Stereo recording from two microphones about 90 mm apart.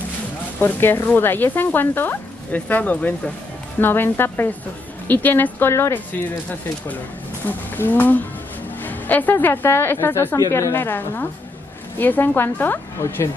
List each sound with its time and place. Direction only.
0.6 s speech: 25° left (ahead or behind)
7.4 s speech: 20° left (ahead or behind)